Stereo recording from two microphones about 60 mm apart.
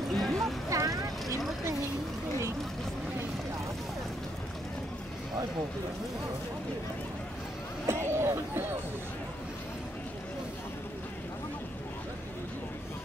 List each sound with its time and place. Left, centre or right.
0.1 s boat: centre
0.7 s vehicle: right
7.9 s a sound: right